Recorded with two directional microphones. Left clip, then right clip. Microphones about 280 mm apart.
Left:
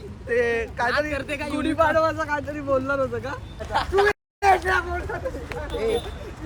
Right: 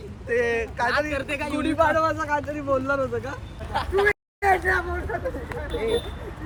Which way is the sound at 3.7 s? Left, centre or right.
Left.